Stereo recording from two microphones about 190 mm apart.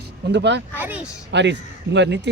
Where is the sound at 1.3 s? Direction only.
65° right (ahead or behind).